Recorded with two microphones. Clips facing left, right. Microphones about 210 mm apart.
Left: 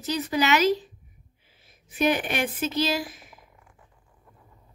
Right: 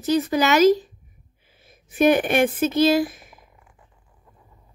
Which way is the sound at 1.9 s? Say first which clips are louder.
Right 7 dB; 50° right (ahead or behind).